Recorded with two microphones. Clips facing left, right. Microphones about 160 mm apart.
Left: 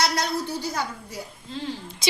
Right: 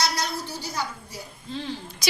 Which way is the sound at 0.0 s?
55° left (ahead or behind).